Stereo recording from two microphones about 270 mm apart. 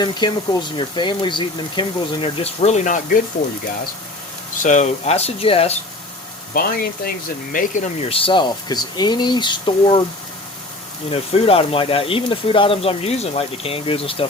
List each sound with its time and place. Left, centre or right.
0.0 s speech: centre
4.6 s speech: left
6.5 s speech: left
11.1 s speech: left